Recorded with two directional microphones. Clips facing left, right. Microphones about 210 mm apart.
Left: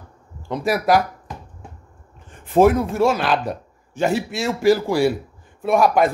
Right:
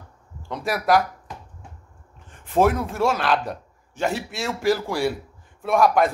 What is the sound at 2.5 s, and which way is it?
A man's voice, centre (ahead or behind).